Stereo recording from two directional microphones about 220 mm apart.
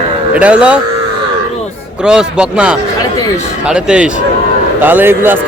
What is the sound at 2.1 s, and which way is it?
A man's voice, 5° right (ahead or behind).